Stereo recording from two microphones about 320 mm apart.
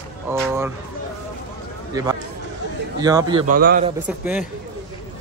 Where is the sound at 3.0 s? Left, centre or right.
Centre.